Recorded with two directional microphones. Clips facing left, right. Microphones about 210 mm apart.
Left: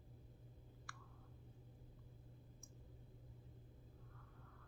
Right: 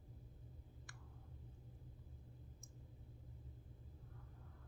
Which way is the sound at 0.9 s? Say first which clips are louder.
Left 3 dB; 20° right (ahead or behind).